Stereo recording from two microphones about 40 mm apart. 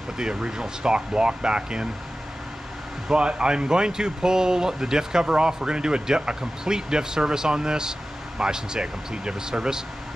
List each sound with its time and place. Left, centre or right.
0.2 s speech: centre
3.1 s speech: right